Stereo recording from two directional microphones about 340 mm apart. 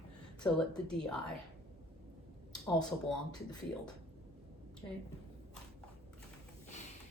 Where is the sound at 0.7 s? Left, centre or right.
Centre.